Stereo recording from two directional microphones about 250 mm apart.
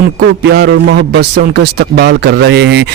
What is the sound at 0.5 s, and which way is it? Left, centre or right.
A man's voice, right.